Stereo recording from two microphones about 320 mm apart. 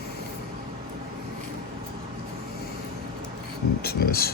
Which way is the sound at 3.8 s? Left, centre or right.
Left.